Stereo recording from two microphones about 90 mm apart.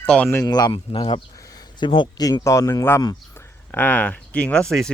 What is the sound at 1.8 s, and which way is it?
Speech, 60° left (ahead or behind).